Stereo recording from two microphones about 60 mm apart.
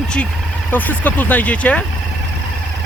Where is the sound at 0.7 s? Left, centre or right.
Left.